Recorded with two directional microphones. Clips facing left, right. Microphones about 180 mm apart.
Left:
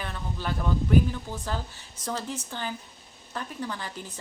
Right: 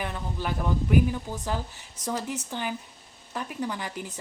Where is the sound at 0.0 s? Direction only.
15° right (ahead or behind).